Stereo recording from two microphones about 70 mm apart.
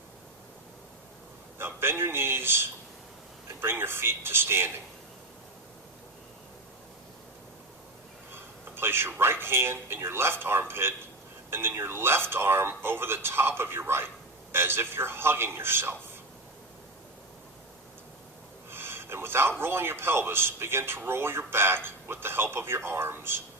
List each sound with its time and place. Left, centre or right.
1.5 s a man's voice: right
8.7 s a man's voice: right
18.7 s a man's voice: right